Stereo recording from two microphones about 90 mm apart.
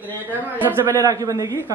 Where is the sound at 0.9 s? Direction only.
40° right (ahead or behind).